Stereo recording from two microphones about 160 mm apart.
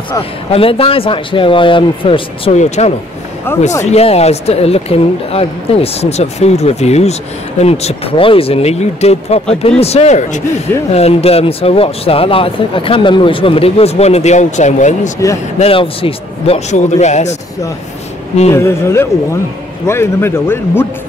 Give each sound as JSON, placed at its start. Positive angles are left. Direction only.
{"t": 0.5, "sound": "speech", "side_deg": 35}
{"t": 3.5, "sound": "speech", "side_deg": 15}
{"t": 3.8, "sound": "speech", "side_deg": 40}
{"t": 15.6, "sound": "speech", "side_deg": 35}
{"t": 18.5, "sound": "speech", "side_deg": 15}